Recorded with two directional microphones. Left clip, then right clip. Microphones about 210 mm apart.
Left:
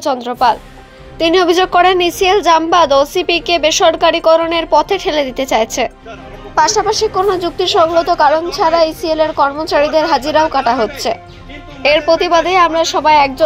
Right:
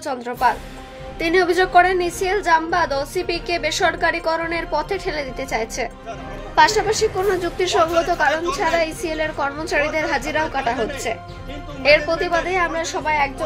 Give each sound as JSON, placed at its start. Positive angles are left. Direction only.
{"t": 0.0, "sound": "a woman's voice", "side_deg": 25}
{"t": 6.8, "sound": "a woman's voice", "side_deg": 15}